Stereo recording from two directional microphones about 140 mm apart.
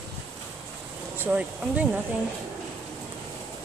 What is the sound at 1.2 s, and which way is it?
Speech, 10° right (ahead or behind).